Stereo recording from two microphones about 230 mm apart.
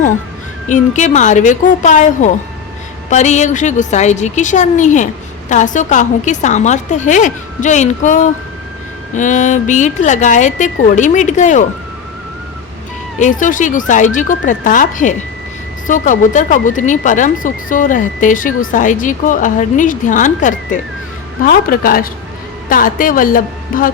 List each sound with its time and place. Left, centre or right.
0.7 s a woman's voice: left
13.1 s a woman's voice: left